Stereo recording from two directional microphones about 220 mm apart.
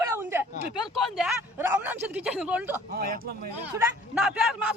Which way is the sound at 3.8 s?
5° right (ahead or behind).